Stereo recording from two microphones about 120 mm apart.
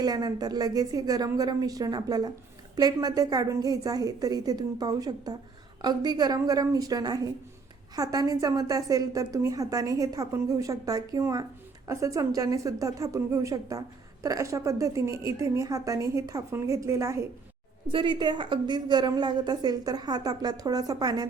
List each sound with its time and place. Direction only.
0.0 s a woman's voice: 35° right (ahead or behind)
17.8 s a woman's voice: 45° right (ahead or behind)